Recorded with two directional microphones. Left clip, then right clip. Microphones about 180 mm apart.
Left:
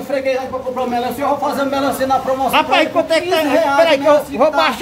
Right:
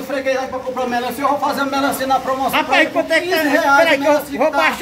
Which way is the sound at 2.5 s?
15° left (ahead or behind).